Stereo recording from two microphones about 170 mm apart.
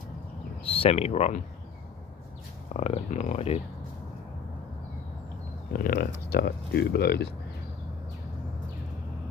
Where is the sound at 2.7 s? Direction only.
40° left (ahead or behind).